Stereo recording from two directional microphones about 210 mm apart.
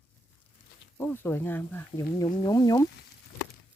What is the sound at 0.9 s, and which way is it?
Speech, 10° left (ahead or behind).